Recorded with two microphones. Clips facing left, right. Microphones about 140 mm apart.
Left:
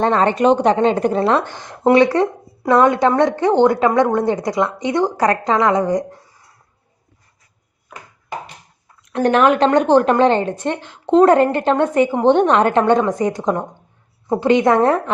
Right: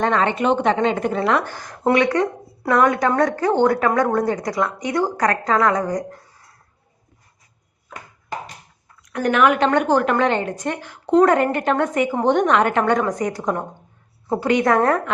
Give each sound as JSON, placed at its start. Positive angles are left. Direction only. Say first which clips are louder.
{"t": 0.0, "sound": "a woman's voice", "louder": "left 4 dB", "side_deg": 35}
{"t": 9.0, "sound": "a woman's voice", "louder": "left 3 dB", "side_deg": 30}